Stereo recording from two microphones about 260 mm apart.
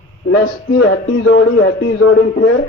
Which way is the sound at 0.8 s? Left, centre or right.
Left.